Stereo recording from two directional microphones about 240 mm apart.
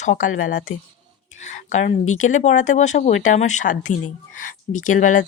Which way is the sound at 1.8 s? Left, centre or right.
Left.